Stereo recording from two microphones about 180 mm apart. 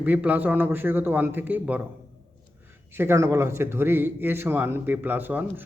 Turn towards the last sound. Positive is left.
turn(degrees=-10)  # may be behind; listen again after turning